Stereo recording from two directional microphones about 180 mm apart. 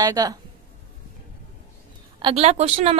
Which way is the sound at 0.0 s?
20° right (ahead or behind).